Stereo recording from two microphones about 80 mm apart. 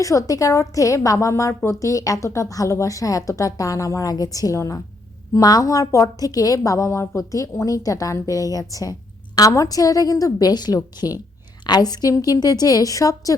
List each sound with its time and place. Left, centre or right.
0.0 s a woman's voice: left